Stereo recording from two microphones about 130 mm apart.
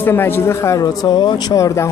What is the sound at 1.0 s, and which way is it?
Speech, 35° left (ahead or behind).